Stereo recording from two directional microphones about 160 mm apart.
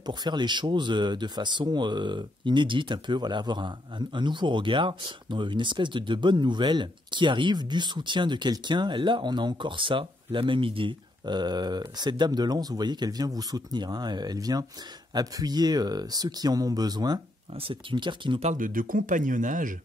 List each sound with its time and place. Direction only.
0.0 s speech: 25° right (ahead or behind)
18.4 s speech: 50° right (ahead or behind)